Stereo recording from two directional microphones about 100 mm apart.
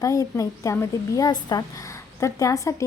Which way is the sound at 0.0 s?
35° left (ahead or behind).